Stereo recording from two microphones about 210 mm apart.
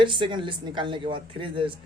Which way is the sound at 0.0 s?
20° right (ahead or behind).